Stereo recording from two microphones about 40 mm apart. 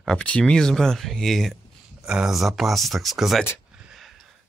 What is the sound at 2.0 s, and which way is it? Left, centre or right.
Speech, right.